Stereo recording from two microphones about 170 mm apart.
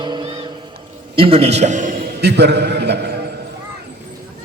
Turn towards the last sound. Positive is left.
turn(degrees=-75)  # may be behind; listen again after turning